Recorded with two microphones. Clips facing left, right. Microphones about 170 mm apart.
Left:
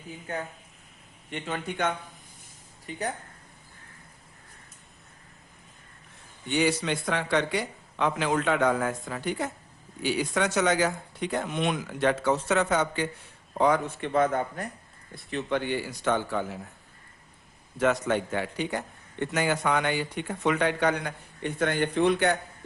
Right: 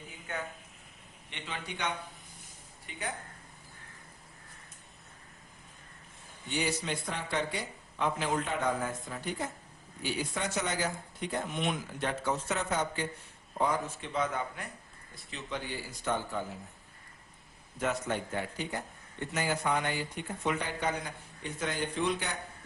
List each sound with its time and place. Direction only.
0.3 s speech: 35° left (ahead or behind)
1.3 s speech: 45° left (ahead or behind)
2.9 s speech: 40° left (ahead or behind)
6.5 s speech: 85° left
13.5 s a man's voice: 75° left (ahead or behind); by 14.7 s 45° left (ahead or behind)
15.1 s speech: 60° left (ahead or behind); by 16.6 s 80° left
17.7 s speech: 85° left; by 22.4 s 65° left (ahead or behind)